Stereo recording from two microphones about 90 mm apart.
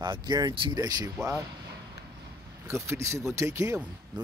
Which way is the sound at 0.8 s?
45° right (ahead or behind).